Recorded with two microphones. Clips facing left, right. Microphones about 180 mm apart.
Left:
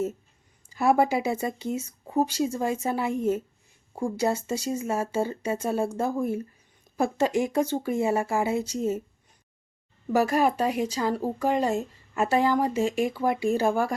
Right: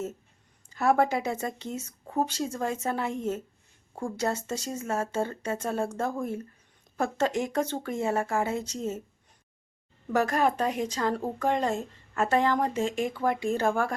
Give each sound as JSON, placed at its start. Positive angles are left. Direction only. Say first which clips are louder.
{"t": 0.7, "sound": "speech", "louder": "left 2 dB", "side_deg": 10}
{"t": 10.1, "sound": "speech", "louder": "left 3 dB", "side_deg": 10}